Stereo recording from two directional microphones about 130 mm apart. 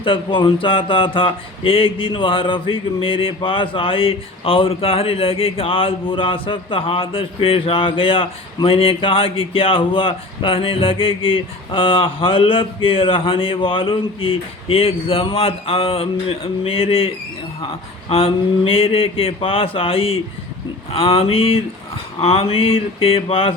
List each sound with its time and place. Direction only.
0.0 s speech: 40° left (ahead or behind)
18.1 s speech: 45° left (ahead or behind)